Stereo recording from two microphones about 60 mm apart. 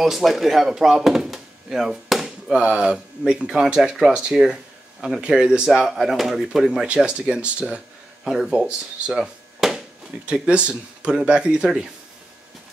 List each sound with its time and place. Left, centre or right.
0.0 s speech: centre
8.2 s speech: centre
8.5 s speech: centre
9.6 s a sound: centre
10.3 s speech: centre